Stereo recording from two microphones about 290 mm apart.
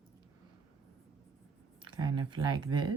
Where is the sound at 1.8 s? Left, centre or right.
Centre.